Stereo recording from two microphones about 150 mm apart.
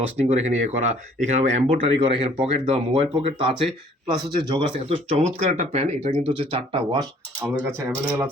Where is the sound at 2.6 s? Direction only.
45° right (ahead or behind).